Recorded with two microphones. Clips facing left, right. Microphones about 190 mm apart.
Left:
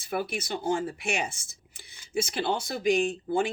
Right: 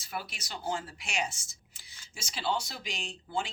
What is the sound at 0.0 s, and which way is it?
Speech, 55° left (ahead or behind).